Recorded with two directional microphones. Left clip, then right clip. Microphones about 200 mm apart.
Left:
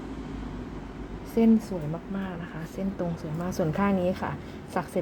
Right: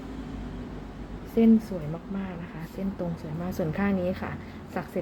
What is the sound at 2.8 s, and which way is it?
A woman's voice, 5° left (ahead or behind).